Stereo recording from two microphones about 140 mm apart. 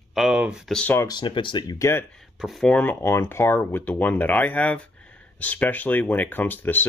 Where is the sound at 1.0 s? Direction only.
35° left (ahead or behind).